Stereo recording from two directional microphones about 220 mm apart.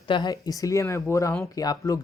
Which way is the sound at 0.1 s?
20° left (ahead or behind).